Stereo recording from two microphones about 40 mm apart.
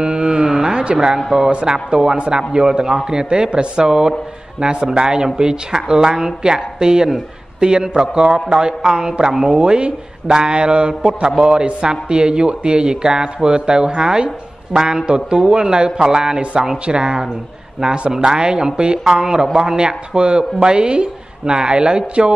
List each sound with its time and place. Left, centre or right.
0.0 s a sound: centre
0.9 s a woman's voice: centre
9.3 s a woman's voice: centre
9.6 s a woman's voice: right